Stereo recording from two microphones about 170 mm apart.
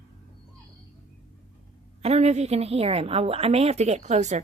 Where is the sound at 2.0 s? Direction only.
40° right (ahead or behind).